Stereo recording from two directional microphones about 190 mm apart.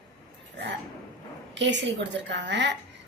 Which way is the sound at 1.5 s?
70° right (ahead or behind).